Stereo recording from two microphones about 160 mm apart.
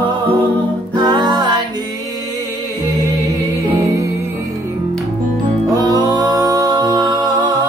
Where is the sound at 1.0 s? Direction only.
30° right (ahead or behind).